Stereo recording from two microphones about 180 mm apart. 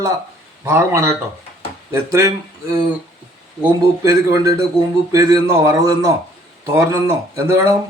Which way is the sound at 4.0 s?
20° right (ahead or behind).